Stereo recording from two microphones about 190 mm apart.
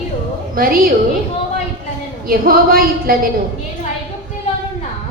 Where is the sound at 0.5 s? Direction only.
50° right (ahead or behind).